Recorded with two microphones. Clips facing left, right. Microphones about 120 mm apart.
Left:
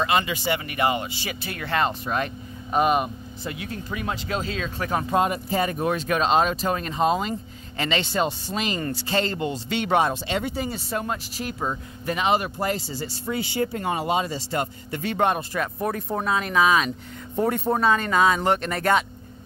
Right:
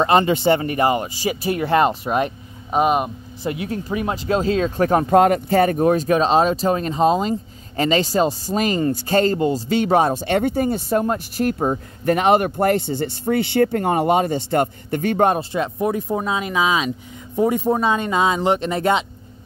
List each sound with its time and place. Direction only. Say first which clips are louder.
0.0 s speech: right 8 dB; 50° right (ahead or behind)
0.6 s speech: right 5 dB; 35° right (ahead or behind)
1.5 s speech: right 8 dB; 20° right (ahead or behind)
2.7 s speech: right 3 dB; 5° right (ahead or behind)
3.6 s speech: right 5 dB; 20° right (ahead or behind); by 5.0 s 40° right (ahead or behind)
5.1 s speech: right 8 dB; 70° right (ahead or behind)
5.8 s speech: right 7 dB; 40° right (ahead or behind)
10.2 s speech: right 8 dB; 55° right (ahead or behind)
11.3 s speech: right 9 dB; 55° right (ahead or behind); by 15.4 s 40° right (ahead or behind)
15.5 s speech: right 5 dB; 20° right (ahead or behind)